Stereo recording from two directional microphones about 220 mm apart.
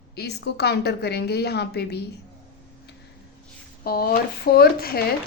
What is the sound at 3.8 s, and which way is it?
A woman's voice, 45° left (ahead or behind).